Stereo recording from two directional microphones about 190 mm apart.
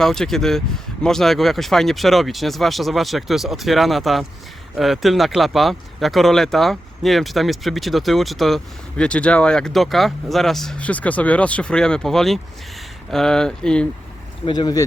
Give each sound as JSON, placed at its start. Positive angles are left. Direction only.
{"t": 0.0, "sound": "speech", "side_deg": 0}
{"t": 14.4, "sound": "speech", "side_deg": 20}